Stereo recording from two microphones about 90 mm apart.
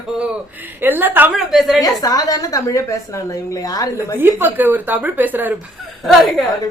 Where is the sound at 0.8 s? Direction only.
20° right (ahead or behind).